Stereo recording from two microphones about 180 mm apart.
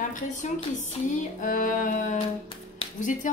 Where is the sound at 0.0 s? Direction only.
45° left (ahead or behind).